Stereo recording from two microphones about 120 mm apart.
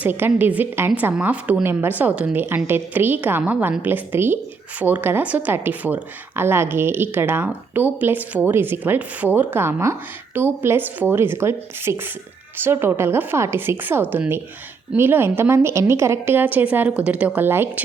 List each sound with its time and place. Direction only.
0.0 s a woman's voice: 15° right (ahead or behind)